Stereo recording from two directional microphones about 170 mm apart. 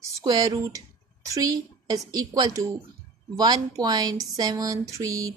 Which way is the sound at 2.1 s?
20° right (ahead or behind).